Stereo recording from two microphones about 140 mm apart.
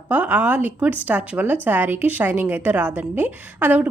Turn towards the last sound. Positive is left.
turn(degrees=-10)  # may be behind; listen again after turning